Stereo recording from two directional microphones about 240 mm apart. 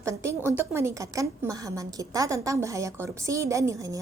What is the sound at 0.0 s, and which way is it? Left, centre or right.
A woman's voice, centre.